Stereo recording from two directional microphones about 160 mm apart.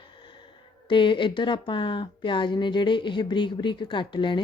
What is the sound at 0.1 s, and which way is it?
Speech, 30° left (ahead or behind).